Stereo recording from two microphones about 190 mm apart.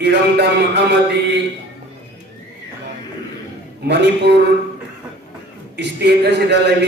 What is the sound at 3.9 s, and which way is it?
Speech, 65° right (ahead or behind).